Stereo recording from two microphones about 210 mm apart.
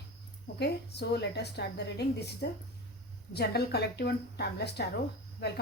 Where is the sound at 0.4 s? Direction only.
50° left (ahead or behind).